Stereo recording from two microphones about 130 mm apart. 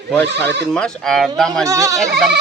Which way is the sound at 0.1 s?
10° left (ahead or behind).